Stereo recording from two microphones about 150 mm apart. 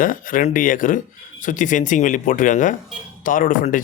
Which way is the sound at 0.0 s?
65° left (ahead or behind).